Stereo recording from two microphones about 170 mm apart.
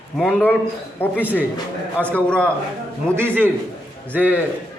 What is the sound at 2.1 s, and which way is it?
Speech, 5° left (ahead or behind).